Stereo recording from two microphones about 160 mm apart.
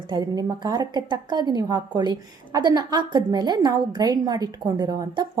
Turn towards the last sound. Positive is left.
turn(degrees=-20)  # may be behind; listen again after turning